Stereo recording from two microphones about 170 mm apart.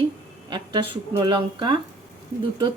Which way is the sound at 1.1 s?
25° right (ahead or behind).